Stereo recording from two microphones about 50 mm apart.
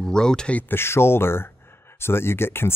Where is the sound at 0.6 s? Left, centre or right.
Left.